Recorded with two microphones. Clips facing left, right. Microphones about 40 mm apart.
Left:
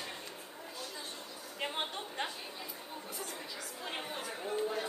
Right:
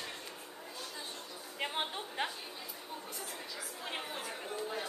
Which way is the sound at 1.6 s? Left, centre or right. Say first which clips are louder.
Right 1 dB; centre.